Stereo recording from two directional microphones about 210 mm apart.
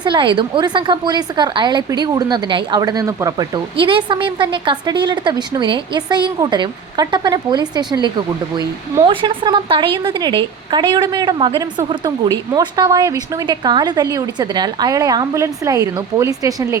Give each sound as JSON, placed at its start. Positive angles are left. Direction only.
{"t": 0.0, "sound": "speech", "side_deg": -20}